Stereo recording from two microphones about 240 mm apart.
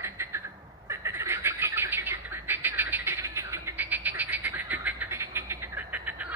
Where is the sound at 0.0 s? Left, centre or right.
Centre.